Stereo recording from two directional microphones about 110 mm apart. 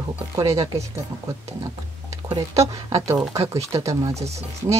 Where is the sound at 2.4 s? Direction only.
30° right (ahead or behind).